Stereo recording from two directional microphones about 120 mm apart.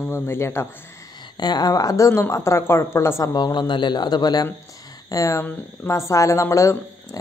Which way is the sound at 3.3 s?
35° left (ahead or behind).